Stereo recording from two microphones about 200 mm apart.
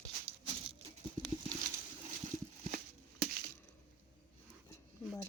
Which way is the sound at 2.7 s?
50° right (ahead or behind).